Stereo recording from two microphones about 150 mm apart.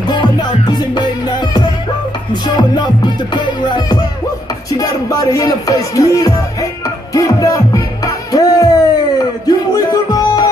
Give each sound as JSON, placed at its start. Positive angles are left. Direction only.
{"t": 0.1, "sound": "music", "side_deg": 30}
{"t": 2.4, "sound": "music", "side_deg": 30}
{"t": 4.7, "sound": "speech", "side_deg": 25}
{"t": 7.2, "sound": "music", "side_deg": 20}